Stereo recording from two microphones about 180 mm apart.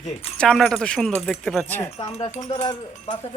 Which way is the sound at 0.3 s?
Centre (ahead or behind).